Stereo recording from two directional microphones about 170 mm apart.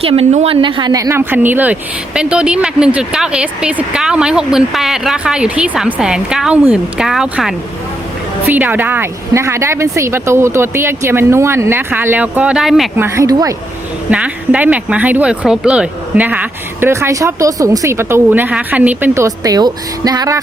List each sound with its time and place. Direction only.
0.0 s speech: 35° right (ahead or behind); by 12.9 s centre (ahead or behind)
13.0 s speech: 15° right (ahead or behind)
14.1 s speech: 5° right (ahead or behind)